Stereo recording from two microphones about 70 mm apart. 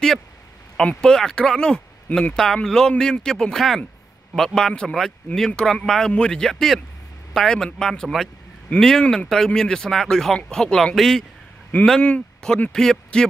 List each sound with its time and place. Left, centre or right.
0.7 s speech: centre
2.0 s speech: left
2.3 s a man's voice: centre